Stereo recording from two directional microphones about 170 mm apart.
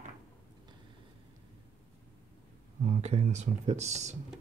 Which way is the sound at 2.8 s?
40° right (ahead or behind).